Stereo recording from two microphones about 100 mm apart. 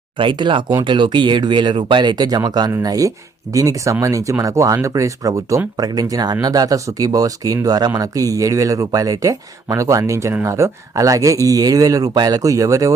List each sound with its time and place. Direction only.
0.2 s speech: 55° right (ahead or behind); by 12.9 s 35° right (ahead or behind)